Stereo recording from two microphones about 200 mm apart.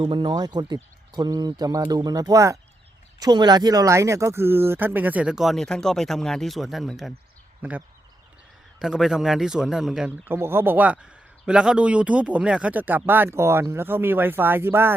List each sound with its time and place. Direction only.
0.0 s a man's voice: 25° right (ahead or behind)